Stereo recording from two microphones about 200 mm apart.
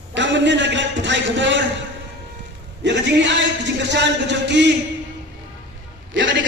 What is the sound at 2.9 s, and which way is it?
Speech, 65° right (ahead or behind).